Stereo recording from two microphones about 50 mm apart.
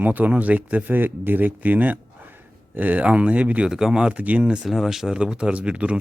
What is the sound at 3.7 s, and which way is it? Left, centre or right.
Speech, centre.